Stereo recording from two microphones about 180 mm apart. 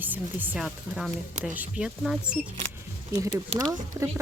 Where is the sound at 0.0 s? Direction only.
10° right (ahead or behind).